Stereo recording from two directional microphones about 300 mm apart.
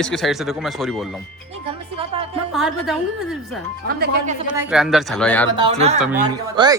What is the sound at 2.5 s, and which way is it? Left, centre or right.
A man's voice, centre.